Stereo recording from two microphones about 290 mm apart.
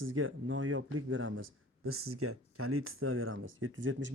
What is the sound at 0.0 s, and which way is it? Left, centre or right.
Speech, right.